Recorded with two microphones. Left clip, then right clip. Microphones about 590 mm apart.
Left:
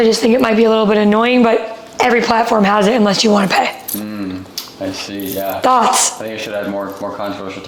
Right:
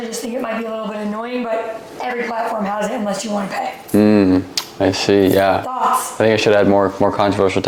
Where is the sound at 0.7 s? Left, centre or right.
Left.